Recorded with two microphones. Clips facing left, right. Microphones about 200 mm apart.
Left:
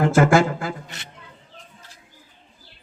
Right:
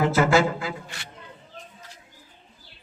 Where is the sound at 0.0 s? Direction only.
50° left (ahead or behind).